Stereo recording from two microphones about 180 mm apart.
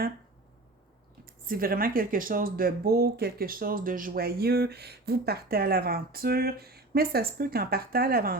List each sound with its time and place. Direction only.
1.2 s speech: 55° right (ahead or behind)